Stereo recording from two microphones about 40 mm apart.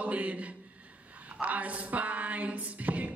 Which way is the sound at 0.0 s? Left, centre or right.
Right.